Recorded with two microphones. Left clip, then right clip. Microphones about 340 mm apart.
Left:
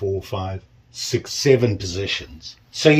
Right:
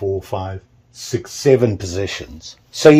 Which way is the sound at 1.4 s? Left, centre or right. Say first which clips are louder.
Right 4 dB; centre.